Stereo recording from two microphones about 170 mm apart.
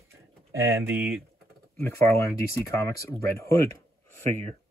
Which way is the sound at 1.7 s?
15° left (ahead or behind).